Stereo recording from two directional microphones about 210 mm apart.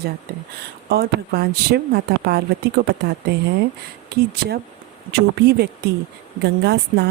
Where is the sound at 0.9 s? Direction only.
50° right (ahead or behind).